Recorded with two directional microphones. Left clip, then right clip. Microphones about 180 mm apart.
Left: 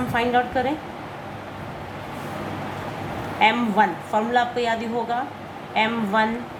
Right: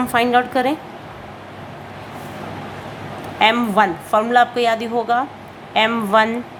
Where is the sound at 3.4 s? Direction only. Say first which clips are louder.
Right 4 dB; 35° right (ahead or behind).